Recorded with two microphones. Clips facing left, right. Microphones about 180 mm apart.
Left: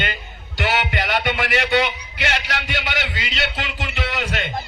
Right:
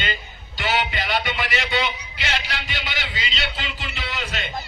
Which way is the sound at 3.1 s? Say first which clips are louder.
Left 3 dB; 55° left (ahead or behind).